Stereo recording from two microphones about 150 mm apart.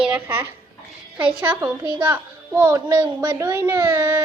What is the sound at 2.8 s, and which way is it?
Speech, 30° right (ahead or behind).